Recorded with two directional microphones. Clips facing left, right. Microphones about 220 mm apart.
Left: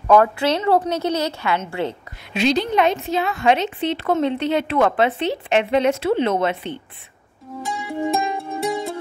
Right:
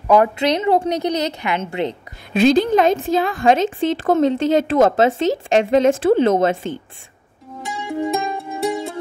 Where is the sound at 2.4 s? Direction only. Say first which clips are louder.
Right 4 dB; 45° right (ahead or behind).